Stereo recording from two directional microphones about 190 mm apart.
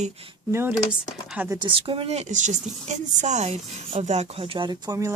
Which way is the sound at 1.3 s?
10° right (ahead or behind).